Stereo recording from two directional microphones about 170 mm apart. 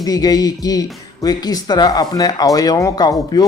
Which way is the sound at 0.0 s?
20° left (ahead or behind).